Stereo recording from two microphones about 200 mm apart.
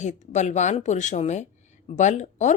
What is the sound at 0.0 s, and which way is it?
Speech, 35° left (ahead or behind).